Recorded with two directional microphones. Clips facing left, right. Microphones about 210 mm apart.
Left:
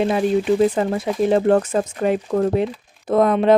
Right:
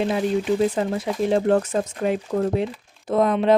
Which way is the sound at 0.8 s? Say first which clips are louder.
Left 3 dB; 60° left (ahead or behind).